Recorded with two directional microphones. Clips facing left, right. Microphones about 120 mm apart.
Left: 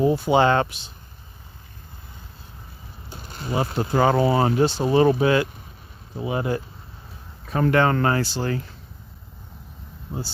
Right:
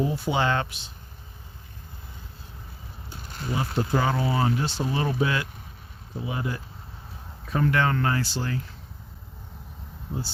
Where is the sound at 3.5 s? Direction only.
50° left (ahead or behind).